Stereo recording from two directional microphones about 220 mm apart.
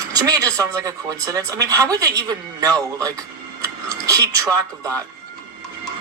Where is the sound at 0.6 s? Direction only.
15° right (ahead or behind).